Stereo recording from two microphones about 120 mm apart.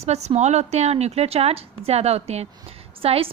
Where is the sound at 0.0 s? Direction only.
65° right (ahead or behind).